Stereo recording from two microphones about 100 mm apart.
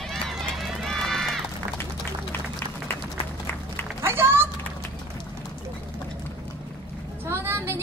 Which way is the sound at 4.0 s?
25° right (ahead or behind).